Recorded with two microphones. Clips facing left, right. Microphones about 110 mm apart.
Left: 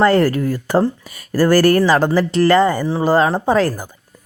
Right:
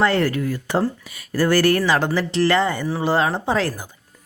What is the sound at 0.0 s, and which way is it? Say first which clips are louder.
Speech: left 5 dB; 40° left (ahead or behind).